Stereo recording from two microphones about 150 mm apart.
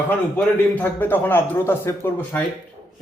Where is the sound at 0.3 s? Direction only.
15° left (ahead or behind).